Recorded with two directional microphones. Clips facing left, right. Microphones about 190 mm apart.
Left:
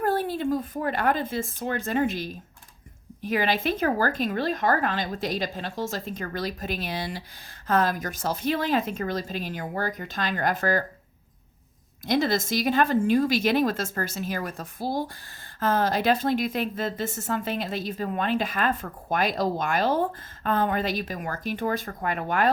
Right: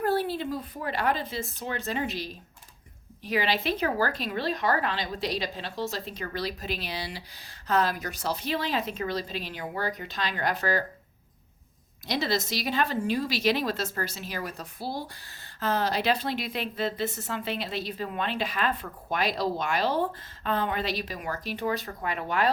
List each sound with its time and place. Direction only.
0.0 s a woman's voice: 50° left (ahead or behind)
12.0 s a woman's voice: 50° left (ahead or behind)